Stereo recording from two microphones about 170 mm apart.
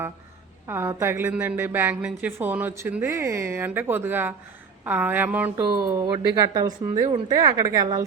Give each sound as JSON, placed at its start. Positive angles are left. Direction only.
{"t": 0.7, "sound": "a woman's voice", "side_deg": -15}
{"t": 5.5, "sound": "a woman's voice", "side_deg": -20}